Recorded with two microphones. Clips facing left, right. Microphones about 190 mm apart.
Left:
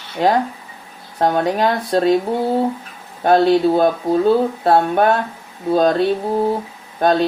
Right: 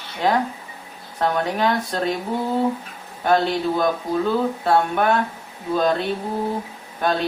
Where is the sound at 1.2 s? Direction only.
35° left (ahead or behind).